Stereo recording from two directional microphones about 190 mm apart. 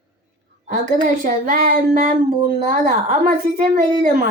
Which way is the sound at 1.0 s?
45° right (ahead or behind).